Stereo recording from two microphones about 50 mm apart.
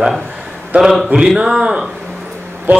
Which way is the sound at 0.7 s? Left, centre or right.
Centre.